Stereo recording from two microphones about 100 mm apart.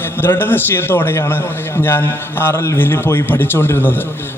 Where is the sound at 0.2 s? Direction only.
20° left (ahead or behind).